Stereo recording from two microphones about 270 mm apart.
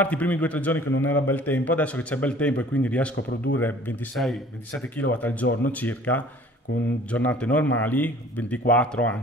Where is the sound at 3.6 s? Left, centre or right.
Centre.